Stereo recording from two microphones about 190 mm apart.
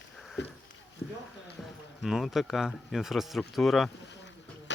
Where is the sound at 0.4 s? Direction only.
70° left (ahead or behind).